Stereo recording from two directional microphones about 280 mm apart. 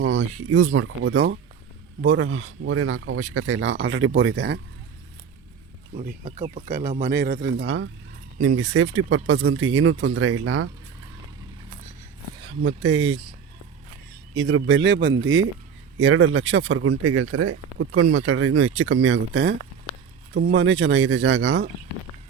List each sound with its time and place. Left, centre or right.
0.4 s speech: right
5.9 s speech: right
8.4 s speech: right
12.5 s speech: right
14.4 s speech: right